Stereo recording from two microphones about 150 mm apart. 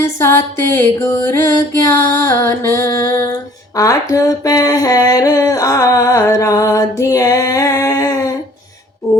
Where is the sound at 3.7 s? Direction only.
20° left (ahead or behind).